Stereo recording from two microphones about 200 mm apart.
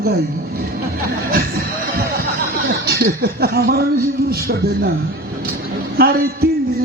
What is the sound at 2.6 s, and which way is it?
Speech, 50° right (ahead or behind).